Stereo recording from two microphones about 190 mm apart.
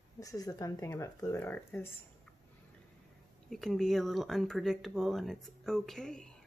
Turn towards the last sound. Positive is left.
turn(degrees=5)  # may be behind; listen again after turning